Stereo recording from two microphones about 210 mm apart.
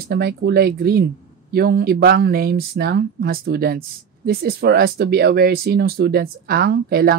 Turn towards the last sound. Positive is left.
turn(degrees=-50)  # may be behind; listen again after turning